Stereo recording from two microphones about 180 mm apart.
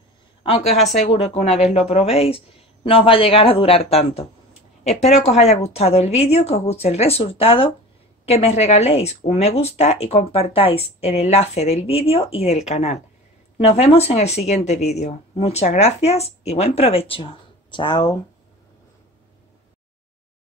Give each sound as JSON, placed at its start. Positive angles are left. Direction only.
{"t": 0.4, "sound": "a woman's voice", "side_deg": 30}